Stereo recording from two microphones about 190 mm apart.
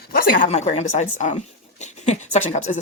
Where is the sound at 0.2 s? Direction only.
50° left (ahead or behind).